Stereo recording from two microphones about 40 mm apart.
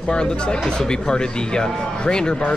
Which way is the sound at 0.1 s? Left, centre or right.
Left.